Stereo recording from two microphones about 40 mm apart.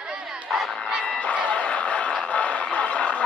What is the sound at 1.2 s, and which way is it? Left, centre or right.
Music, left.